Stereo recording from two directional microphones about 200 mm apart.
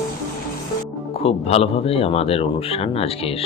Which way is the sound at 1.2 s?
30° left (ahead or behind).